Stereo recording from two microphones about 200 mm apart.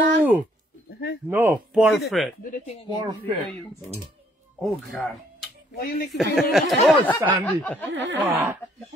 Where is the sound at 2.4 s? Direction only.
45° left (ahead or behind).